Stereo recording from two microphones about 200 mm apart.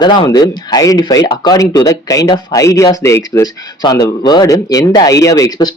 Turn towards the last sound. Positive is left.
turn(degrees=20)  # may be behind; listen again after turning